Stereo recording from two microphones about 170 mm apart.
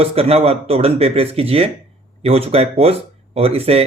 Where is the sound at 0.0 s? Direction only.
35° right (ahead or behind).